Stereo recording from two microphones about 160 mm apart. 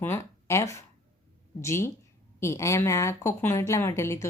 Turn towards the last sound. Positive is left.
turn(degrees=20)  # may be behind; listen again after turning